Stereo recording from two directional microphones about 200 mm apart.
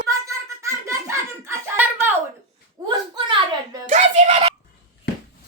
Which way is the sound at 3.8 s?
35° right (ahead or behind).